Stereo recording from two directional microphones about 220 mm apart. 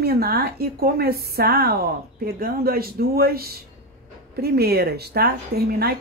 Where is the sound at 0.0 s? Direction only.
45° right (ahead or behind).